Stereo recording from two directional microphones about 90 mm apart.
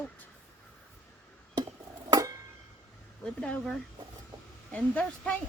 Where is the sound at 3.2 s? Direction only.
10° left (ahead or behind).